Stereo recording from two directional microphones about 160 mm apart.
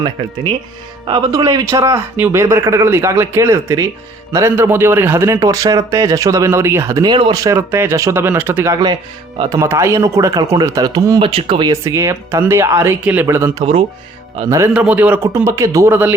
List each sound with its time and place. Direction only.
1.0 s speech: 25° right (ahead or behind)
11.2 s speech: 35° right (ahead or behind)
11.7 s speech: 20° right (ahead or behind)
14.7 s speech: 10° right (ahead or behind)